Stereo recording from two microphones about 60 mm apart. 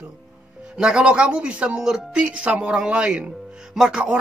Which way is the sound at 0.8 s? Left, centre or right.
Centre.